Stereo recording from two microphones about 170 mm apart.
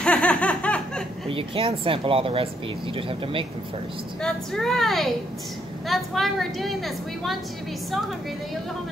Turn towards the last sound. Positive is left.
turn(degrees=0)  # may be behind; listen again after turning